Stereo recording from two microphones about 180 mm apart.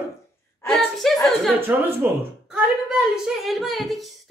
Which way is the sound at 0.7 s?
Centre (ahead or behind).